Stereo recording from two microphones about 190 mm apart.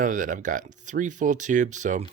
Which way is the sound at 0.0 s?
45° right (ahead or behind).